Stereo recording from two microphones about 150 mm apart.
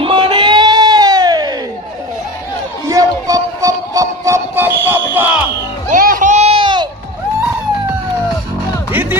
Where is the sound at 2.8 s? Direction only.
20° right (ahead or behind).